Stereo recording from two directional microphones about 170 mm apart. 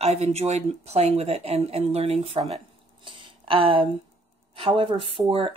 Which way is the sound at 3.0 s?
30° right (ahead or behind).